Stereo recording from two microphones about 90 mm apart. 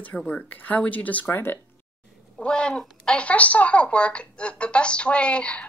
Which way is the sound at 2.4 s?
10° left (ahead or behind).